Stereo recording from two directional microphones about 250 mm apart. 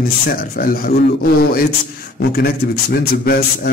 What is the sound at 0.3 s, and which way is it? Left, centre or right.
A man's voice, left.